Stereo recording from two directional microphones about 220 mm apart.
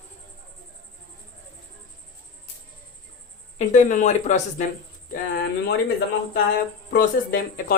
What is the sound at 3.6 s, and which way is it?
Speech, 35° left (ahead or behind).